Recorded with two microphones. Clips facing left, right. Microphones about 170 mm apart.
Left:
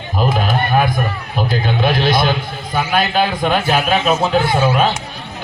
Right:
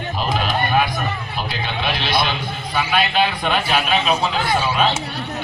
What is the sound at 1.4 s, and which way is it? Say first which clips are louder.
A man's voice: left 10 dB; 45° left (ahead or behind).